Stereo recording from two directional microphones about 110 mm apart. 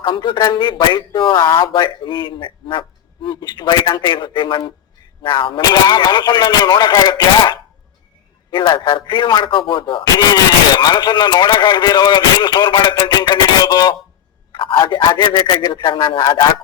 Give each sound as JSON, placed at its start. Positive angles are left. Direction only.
{"t": 0.0, "sound": "speech", "side_deg": 45}
{"t": 14.5, "sound": "speech", "side_deg": 50}